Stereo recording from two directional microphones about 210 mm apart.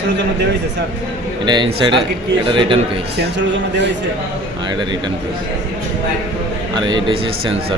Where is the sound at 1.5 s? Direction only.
20° right (ahead or behind).